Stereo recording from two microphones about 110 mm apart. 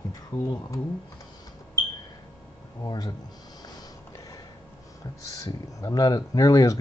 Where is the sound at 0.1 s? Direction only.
35° left (ahead or behind).